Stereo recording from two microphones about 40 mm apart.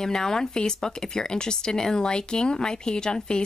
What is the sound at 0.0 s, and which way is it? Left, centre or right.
Speech, centre.